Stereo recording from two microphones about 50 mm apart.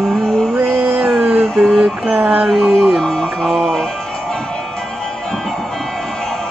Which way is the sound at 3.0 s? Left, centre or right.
Centre.